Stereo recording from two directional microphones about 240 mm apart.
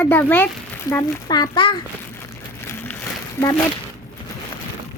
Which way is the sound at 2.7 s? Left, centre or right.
Centre.